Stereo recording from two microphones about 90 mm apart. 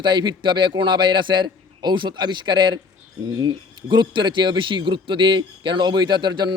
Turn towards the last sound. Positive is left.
turn(degrees=-55)  # may be behind; listen again after turning